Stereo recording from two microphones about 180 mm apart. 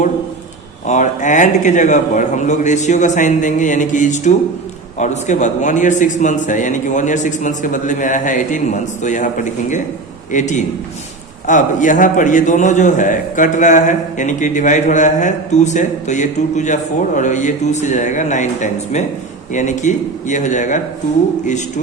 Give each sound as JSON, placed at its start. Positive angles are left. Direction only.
{"t": 0.9, "sound": "a man's voice", "side_deg": 40}